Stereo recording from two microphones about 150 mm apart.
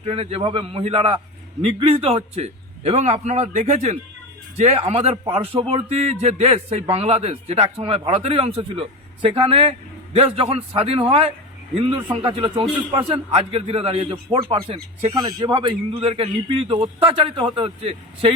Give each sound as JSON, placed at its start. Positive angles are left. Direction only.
{"t": 0.1, "sound": "a man's voice", "side_deg": -40}
{"t": 5.1, "sound": "a man's voice", "side_deg": -35}